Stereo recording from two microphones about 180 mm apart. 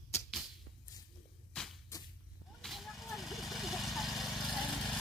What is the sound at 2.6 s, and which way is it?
Vehicle, centre (ahead or behind).